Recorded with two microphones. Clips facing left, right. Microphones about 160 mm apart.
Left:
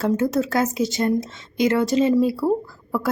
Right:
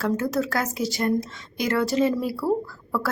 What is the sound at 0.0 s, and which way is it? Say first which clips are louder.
A woman's voice: left 4 dB; 20° left (ahead or behind).